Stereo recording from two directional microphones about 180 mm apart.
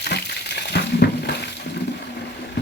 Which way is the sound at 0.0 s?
65° left (ahead or behind).